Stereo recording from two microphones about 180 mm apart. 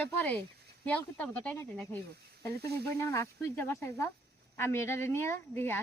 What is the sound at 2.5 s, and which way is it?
Speech, 60° right (ahead or behind).